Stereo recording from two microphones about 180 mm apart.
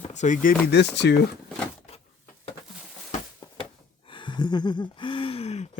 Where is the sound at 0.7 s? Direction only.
75° left (ahead or behind).